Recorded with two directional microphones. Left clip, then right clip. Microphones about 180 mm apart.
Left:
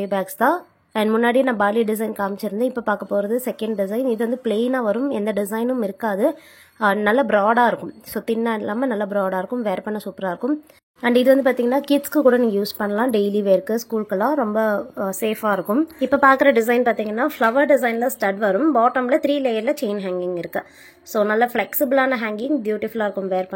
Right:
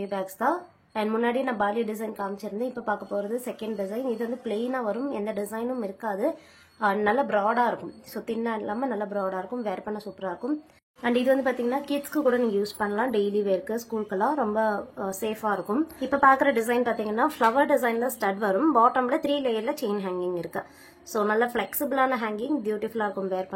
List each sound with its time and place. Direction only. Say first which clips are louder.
0.0 s a woman's voice: left 8 dB; 35° left (ahead or behind); by 23.4 s 20° left (ahead or behind)